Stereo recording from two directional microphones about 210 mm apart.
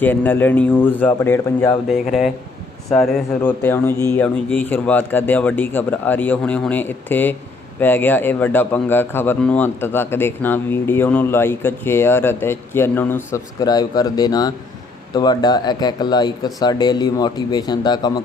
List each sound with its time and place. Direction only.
0.0 s a man's voice: 10° left (ahead or behind)
1.9 s a man's voice: centre (ahead or behind); by 18.2 s 20° left (ahead or behind)